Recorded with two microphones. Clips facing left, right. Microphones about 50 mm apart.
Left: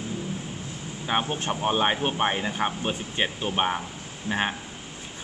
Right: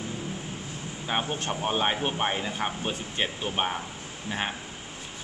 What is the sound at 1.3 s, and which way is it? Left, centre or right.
A man's voice, centre.